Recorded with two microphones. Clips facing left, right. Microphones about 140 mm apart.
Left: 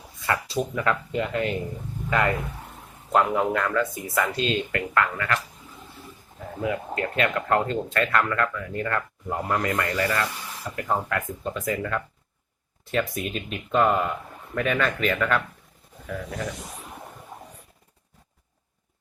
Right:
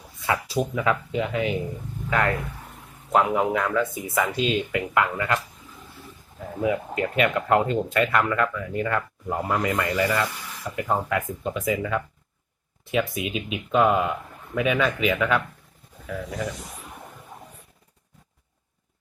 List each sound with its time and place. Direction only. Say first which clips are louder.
0.3 s speech: right 1 dB; 5° right (ahead or behind)
5.1 s speech: right 2 dB; 20° right (ahead or behind)
6.6 s speech: right 3 dB; 10° right (ahead or behind)